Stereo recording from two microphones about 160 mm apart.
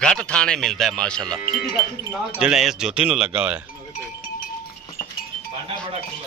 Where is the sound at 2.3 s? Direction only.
5° right (ahead or behind).